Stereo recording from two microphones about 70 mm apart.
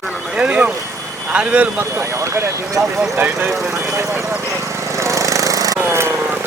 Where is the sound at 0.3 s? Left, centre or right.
Centre.